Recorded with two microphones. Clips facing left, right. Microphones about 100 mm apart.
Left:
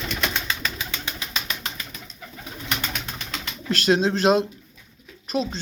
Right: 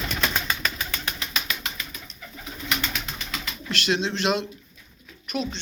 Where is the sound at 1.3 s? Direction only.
35° left (ahead or behind).